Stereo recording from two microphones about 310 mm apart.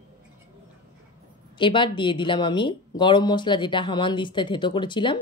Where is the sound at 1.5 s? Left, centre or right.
Centre.